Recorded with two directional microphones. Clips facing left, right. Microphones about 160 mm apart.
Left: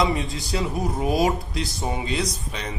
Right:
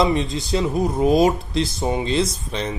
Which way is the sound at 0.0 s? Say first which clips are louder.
Right 4 dB; 20° right (ahead or behind).